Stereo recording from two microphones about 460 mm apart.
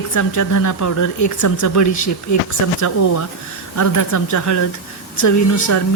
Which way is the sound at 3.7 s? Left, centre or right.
Left.